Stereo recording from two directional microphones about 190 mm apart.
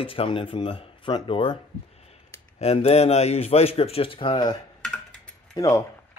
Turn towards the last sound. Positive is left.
turn(degrees=15)  # may be behind; listen again after turning